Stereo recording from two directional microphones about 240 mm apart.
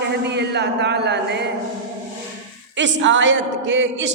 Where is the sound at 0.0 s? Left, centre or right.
Right.